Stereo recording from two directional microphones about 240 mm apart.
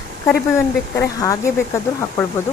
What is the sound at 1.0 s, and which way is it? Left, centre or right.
Speech, centre.